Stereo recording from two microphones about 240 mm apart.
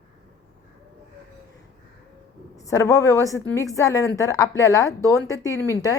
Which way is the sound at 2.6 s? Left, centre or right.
Centre.